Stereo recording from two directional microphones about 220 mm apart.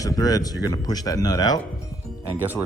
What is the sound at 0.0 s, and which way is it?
Speech, 15° left (ahead or behind).